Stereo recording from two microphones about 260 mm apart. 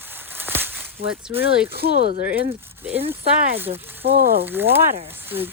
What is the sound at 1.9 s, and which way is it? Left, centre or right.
Speech, left.